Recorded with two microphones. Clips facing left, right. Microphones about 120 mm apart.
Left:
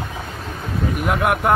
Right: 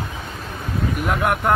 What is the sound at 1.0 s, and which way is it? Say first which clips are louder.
Speech: left 2 dB; 5° left (ahead or behind).